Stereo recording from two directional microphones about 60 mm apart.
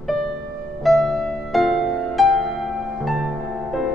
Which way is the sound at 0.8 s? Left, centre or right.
Centre.